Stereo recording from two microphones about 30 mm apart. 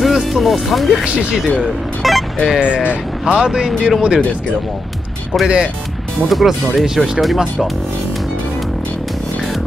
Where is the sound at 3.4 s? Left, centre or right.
Right.